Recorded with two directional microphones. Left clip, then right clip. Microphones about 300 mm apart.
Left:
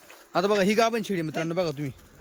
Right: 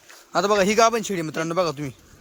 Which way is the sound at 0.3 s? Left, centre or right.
Centre.